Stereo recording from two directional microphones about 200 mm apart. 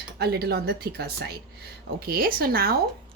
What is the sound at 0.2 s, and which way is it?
Speech, 55° right (ahead or behind).